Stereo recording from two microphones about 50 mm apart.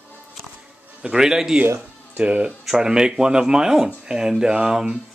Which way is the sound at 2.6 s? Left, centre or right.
Centre.